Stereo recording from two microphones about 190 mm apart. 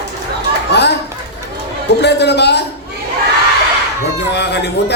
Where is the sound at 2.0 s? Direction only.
65° left (ahead or behind).